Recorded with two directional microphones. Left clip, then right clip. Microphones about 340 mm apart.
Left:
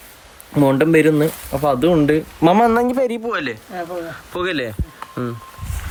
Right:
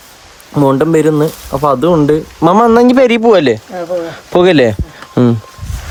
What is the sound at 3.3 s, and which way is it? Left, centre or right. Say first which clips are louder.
Speech: right 13 dB; centre.